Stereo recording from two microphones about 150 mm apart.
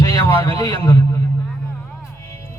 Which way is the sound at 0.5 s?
25° left (ahead or behind).